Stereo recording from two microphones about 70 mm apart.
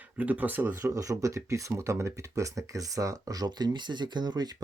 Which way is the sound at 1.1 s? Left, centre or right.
Right.